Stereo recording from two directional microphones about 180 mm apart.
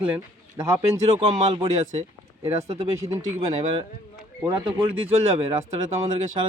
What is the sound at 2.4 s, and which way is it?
Speech, 35° right (ahead or behind).